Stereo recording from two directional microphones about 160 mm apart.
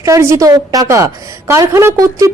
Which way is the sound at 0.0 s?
20° right (ahead or behind).